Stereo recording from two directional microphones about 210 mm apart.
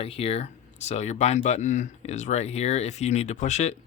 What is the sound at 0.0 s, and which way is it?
Speech, 30° left (ahead or behind).